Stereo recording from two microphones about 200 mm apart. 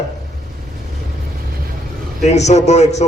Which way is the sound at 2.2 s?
35° left (ahead or behind).